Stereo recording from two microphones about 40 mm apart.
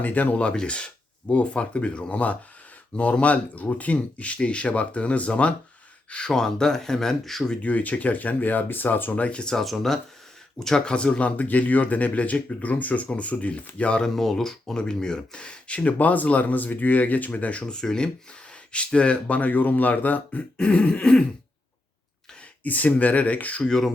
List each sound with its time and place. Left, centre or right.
0.0 s speech: left
0.5 s throat clearing: left
1.3 s speech: left
6.3 s speech: centre
7.6 s speech: left
9.1 s speech: left
9.6 s speech: centre
10.6 s speech: centre; by 14.0 s left
14.0 s speech: centre; by 17.6 s left
17.6 s throat clearing: left
18.7 s speech: left
20.6 s throat clearing: left
22.6 s speech: left
23.6 s speech: centre